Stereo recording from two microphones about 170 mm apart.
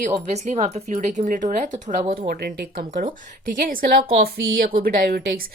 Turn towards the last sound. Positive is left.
turn(degrees=-60)  # may be behind; listen again after turning